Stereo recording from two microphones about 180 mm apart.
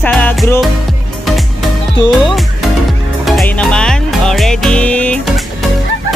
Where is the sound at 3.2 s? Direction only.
5° left (ahead or behind).